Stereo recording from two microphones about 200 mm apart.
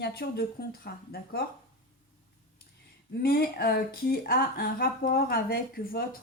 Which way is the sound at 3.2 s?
50° left (ahead or behind).